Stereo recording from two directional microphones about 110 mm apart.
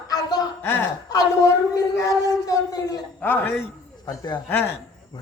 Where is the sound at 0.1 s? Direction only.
40° left (ahead or behind).